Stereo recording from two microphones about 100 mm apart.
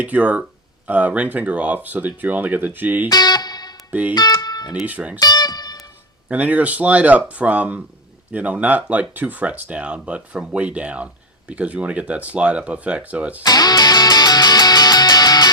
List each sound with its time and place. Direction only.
0.0 s speech: 15° right (ahead or behind)
3.1 s music: 40° left (ahead or behind)
4.1 s speech: 40° left (ahead or behind)
4.9 s speech: 15° right (ahead or behind)
5.2 s music: 40° left (ahead or behind)
6.2 s speech: 15° right (ahead or behind)
13.4 s music: 40° left (ahead or behind)